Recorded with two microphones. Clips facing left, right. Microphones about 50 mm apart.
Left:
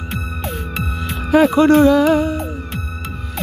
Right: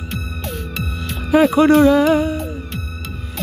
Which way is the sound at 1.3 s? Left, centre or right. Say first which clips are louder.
Left 1 dB; centre.